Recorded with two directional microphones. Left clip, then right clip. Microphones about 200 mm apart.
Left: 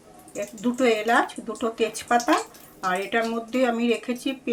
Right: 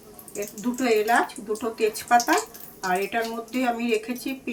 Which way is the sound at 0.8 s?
35° left (ahead or behind).